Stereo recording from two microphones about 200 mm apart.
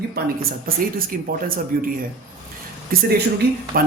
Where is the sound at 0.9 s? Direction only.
45° right (ahead or behind).